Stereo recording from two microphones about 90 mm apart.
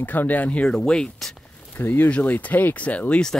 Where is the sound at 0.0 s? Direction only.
20° left (ahead or behind).